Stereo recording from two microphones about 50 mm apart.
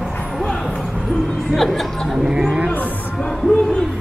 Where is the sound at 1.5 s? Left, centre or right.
Centre.